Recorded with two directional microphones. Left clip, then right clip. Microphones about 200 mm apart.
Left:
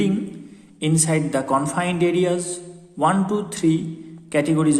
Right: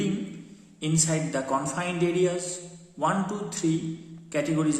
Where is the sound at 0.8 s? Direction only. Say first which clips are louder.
Left 6 dB; 40° left (ahead or behind).